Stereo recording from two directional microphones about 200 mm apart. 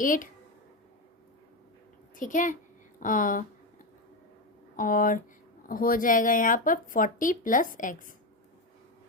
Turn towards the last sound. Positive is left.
turn(degrees=40)  # may be behind; listen again after turning